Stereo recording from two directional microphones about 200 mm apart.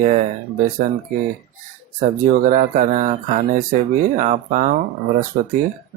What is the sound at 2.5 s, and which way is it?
Speech, 40° right (ahead or behind).